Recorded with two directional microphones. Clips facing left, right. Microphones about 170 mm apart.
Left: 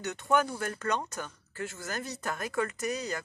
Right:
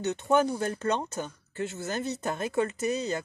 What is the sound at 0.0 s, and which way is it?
Speech, 25° right (ahead or behind).